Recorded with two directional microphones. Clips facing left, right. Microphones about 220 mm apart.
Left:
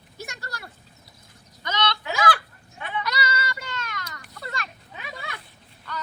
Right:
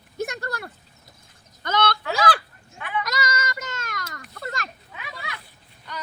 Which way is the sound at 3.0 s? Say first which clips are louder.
Left 1 dB; 45° right (ahead or behind).